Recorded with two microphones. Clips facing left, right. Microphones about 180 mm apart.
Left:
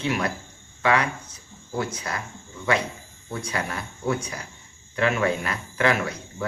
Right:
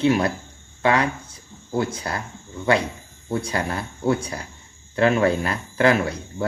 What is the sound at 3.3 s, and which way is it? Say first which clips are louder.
Speech: right 5 dB; 30° right (ahead or behind).